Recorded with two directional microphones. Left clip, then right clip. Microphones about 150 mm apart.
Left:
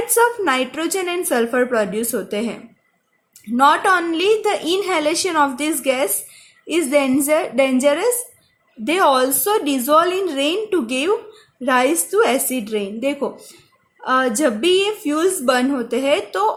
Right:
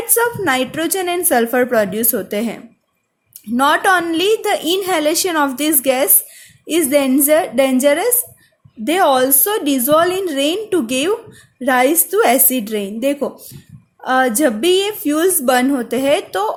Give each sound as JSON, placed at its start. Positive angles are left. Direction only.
{"t": 0.1, "sound": "a woman's voice", "side_deg": -30}